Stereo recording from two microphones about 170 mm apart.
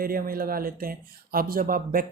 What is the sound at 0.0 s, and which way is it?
Speech, 60° right (ahead or behind).